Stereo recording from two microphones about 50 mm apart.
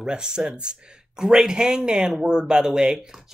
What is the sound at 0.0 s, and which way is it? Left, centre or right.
Speech, centre.